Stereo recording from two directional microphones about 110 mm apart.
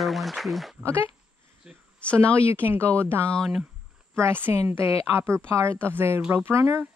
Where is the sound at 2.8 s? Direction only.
10° left (ahead or behind).